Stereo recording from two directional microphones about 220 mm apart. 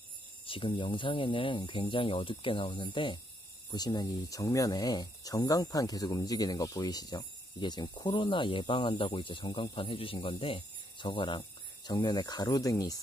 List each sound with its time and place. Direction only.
0.5 s speech: 25° left (ahead or behind)